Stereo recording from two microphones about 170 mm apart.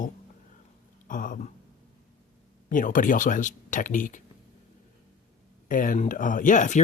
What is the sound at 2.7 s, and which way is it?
Speech, 50° left (ahead or behind).